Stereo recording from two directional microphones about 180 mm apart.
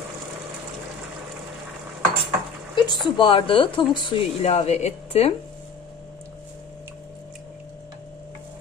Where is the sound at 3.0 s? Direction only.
25° left (ahead or behind).